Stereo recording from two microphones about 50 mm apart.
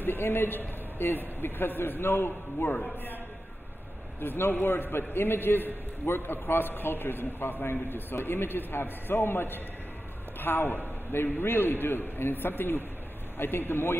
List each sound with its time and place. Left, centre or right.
0.0 s a man's voice: left
2.7 s a man's voice: left
4.2 s a man's voice: left